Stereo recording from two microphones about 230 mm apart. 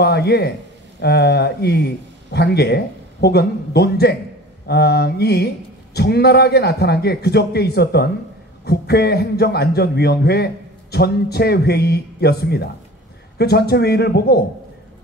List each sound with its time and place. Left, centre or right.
0.0 s a man's voice: left